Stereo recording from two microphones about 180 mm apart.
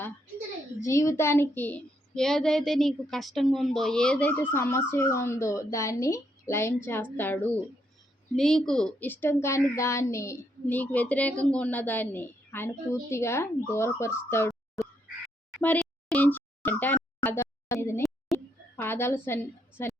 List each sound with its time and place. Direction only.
0.9 s a woman's voice: 15° left (ahead or behind)
15.6 s a sound: 5° left (ahead or behind)
18.8 s a woman's voice: 10° left (ahead or behind)